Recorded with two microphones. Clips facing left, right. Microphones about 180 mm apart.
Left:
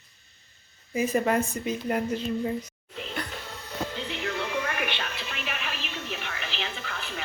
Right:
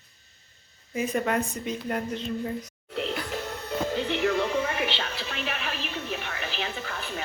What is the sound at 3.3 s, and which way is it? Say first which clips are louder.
Music: right 7 dB; 60° right (ahead or behind).